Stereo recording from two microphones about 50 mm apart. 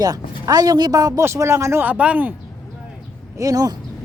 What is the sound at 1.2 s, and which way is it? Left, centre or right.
Speech, right.